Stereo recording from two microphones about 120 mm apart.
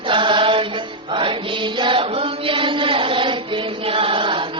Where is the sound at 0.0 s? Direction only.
45° right (ahead or behind).